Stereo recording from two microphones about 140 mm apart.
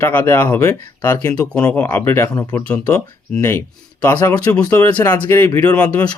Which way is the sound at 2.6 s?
10° left (ahead or behind).